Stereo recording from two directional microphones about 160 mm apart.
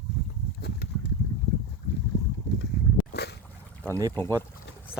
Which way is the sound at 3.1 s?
90° left.